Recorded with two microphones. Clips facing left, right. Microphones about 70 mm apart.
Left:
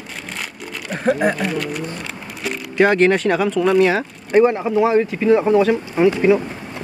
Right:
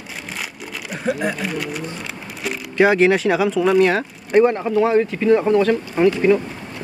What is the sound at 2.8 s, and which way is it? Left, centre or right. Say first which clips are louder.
Speech: even; centre.